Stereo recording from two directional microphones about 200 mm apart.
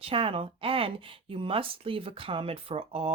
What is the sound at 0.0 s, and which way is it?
Speech, 25° right (ahead or behind).